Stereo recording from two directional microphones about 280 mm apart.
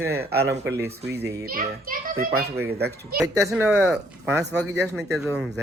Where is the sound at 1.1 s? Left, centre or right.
Right.